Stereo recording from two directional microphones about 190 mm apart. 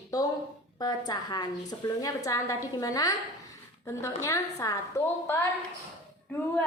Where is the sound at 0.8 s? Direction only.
20° left (ahead or behind).